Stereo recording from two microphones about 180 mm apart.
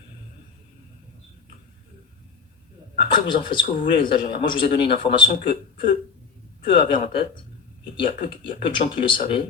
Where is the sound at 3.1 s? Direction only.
25° left (ahead or behind).